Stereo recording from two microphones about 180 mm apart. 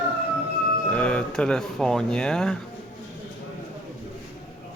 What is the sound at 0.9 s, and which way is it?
Speech, 5° left (ahead or behind).